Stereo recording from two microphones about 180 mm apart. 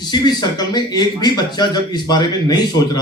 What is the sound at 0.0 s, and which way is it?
Speech, 25° left (ahead or behind).